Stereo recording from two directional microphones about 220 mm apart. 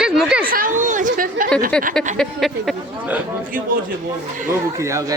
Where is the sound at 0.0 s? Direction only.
5° right (ahead or behind).